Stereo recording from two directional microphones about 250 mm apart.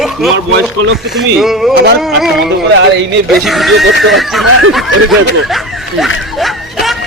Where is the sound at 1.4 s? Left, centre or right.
Centre.